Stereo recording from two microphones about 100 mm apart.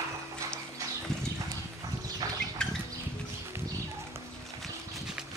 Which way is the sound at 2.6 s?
5° left (ahead or behind).